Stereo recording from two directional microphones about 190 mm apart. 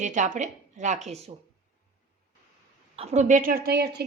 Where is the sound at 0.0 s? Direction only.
40° right (ahead or behind).